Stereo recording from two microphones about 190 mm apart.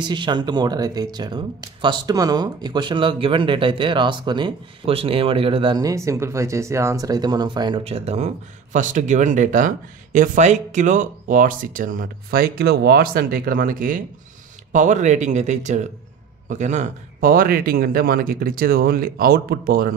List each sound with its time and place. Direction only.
0.0 s speech: 25° right (ahead or behind); by 19.9 s 50° right (ahead or behind)